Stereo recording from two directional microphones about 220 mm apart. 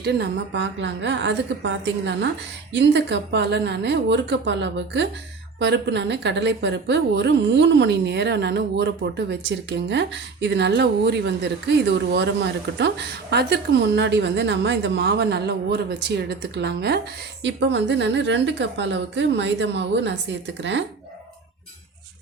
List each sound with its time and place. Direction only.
0.0 s a woman's voice: 50° right (ahead or behind)